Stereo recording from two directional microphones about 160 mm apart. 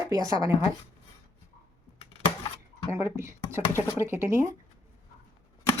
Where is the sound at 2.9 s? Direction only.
15° right (ahead or behind).